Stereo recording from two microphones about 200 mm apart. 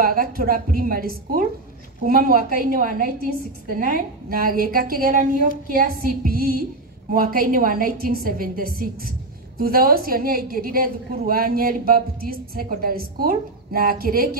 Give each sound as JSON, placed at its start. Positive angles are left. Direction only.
{"t": 0.0, "sound": "a woman's voice", "side_deg": -45}